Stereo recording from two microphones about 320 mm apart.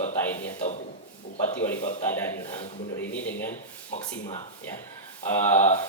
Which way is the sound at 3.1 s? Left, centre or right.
Centre.